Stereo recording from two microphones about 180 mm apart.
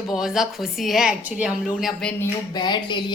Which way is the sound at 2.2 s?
25° left (ahead or behind).